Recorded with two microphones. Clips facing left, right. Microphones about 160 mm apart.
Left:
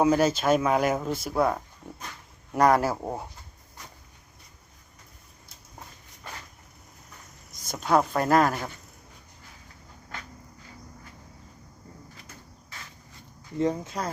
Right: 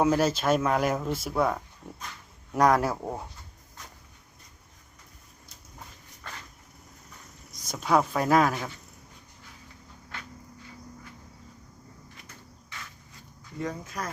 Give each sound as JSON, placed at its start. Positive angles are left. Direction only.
{"t": 0.0, "sound": "speech", "side_deg": 0}
{"t": 7.7, "sound": "speech", "side_deg": 0}
{"t": 13.6, "sound": "speech", "side_deg": 25}